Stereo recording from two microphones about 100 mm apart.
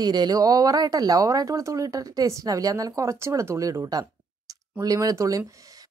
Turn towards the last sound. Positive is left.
turn(degrees=-35)  # may be behind; listen again after turning